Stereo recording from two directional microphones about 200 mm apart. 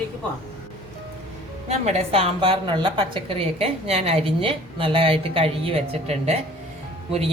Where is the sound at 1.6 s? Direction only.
30° right (ahead or behind).